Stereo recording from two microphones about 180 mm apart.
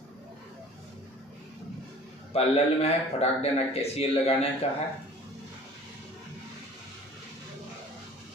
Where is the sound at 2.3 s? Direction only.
35° left (ahead or behind).